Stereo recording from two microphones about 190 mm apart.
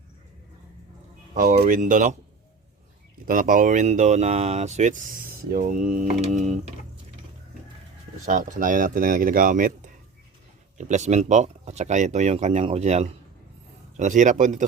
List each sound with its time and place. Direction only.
1.3 s speech: 40° right (ahead or behind)
3.2 s speech: 50° right (ahead or behind)
8.2 s speech: 40° right (ahead or behind)